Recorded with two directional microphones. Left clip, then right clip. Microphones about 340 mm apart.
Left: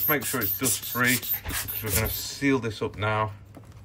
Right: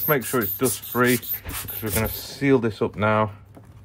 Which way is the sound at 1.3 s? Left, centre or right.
Centre.